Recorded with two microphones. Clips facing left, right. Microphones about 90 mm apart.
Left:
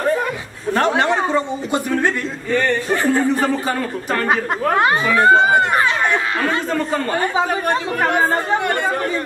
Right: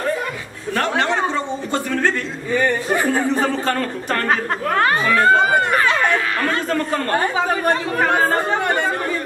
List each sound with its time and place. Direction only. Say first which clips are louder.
0.7 s a man's voice: left 3 dB; 25° left (ahead or behind)
1.0 s a sound: left 2 dB; 10° left (ahead or behind)
2.5 s speech: even; 10° right (ahead or behind)
3.6 s speech: even; 5° left (ahead or behind)
4.6 s speech: left 1 dB; 20° left (ahead or behind)
6.4 s speech: left 1 dB; 5° left (ahead or behind)
7.3 s speech: even; 20° left (ahead or behind)